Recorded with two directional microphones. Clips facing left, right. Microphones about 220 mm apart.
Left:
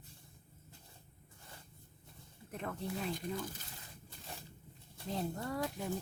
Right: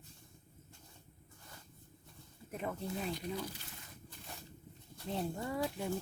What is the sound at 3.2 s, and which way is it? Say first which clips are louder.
Speech: even; 50° left (ahead or behind).